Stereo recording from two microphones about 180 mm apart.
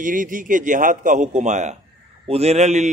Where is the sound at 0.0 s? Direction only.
50° right (ahead or behind).